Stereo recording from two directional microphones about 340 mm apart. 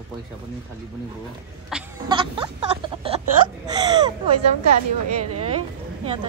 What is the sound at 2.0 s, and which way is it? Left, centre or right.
Speech, centre.